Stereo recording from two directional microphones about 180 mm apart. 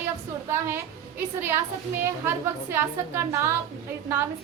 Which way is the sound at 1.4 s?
15° right (ahead or behind).